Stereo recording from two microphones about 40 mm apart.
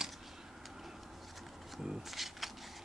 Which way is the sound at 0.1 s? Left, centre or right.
Centre.